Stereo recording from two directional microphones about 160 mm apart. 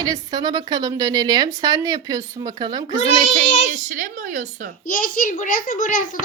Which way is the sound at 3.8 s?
55° right (ahead or behind).